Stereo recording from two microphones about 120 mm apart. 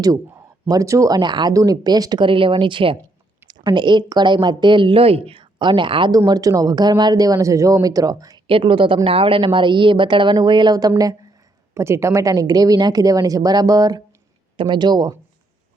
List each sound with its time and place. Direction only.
0.7 s a woman's voice: 25° right (ahead or behind)
8.4 s a woman's voice: 50° right (ahead or behind); by 14.0 s 30° right (ahead or behind)
14.5 s a woman's voice: 45° right (ahead or behind)